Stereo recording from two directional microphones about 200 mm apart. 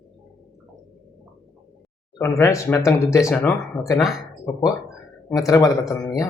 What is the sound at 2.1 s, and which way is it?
Speech, 15° left (ahead or behind).